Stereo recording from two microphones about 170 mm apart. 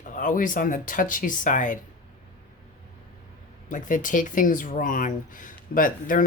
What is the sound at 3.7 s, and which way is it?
Speech, 50° left (ahead or behind).